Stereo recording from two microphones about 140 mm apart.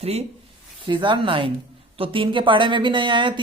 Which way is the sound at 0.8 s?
35° right (ahead or behind).